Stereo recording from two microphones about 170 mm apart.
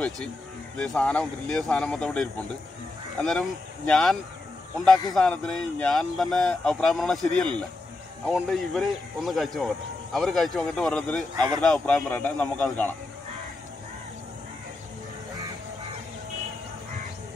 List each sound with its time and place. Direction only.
0.7 s speech: 5° left (ahead or behind)
11.3 s speech: 25° right (ahead or behind)
11.6 s a man's voice: 5° left (ahead or behind)